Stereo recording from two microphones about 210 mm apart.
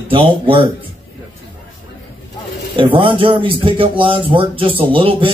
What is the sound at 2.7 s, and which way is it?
Speech, 25° right (ahead or behind).